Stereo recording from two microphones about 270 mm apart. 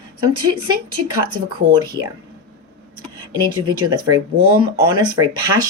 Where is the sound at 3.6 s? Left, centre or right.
Centre.